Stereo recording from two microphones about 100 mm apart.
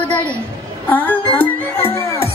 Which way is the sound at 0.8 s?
15° left (ahead or behind).